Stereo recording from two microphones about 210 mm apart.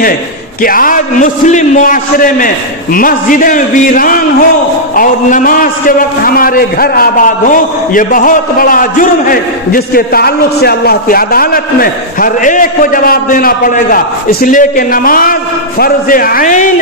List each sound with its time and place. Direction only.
0.6 s a man's voice: 40° left (ahead or behind)